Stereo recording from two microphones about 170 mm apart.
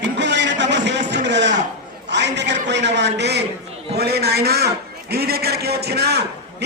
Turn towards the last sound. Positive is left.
turn(degrees=-70)  # may be behind; listen again after turning